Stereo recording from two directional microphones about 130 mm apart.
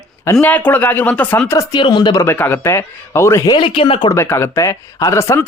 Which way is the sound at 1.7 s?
40° left (ahead or behind).